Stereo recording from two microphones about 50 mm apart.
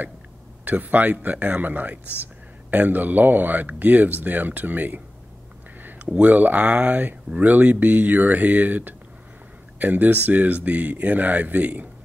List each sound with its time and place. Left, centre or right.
0.7 s speech: right
5.8 s a sound: right
6.1 s speech: right